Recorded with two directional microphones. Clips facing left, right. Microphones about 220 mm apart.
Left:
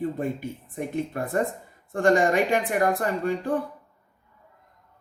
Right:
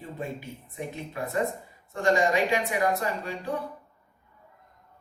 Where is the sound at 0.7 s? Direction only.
50° left (ahead or behind).